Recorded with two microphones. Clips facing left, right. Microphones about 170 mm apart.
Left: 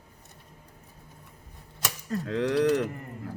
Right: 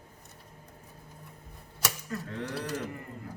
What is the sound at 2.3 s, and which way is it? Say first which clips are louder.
Speech: left 14 dB; 90° left.